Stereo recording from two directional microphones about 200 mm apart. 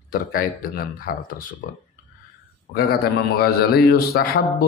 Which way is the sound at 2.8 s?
50° left (ahead or behind).